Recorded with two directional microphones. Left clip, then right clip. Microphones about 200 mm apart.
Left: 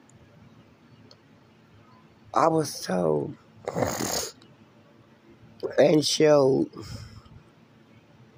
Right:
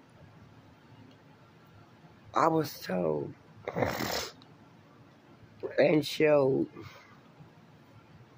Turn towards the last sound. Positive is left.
turn(degrees=20)  # may be behind; listen again after turning